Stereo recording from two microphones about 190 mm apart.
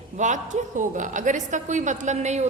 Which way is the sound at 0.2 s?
40° right (ahead or behind).